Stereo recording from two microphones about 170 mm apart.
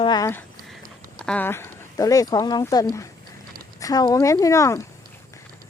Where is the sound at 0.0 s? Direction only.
25° left (ahead or behind).